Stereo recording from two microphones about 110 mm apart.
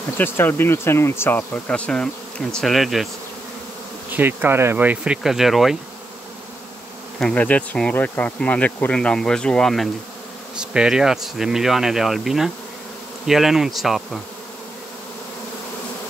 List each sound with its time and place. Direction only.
0.2 s speech: 20° left (ahead or behind); by 3.1 s centre (ahead or behind)
4.1 s speech: 15° right (ahead or behind); by 5.8 s centre (ahead or behind)
7.2 s speech: 10° left (ahead or behind)
10.6 s speech: 5° right (ahead or behind)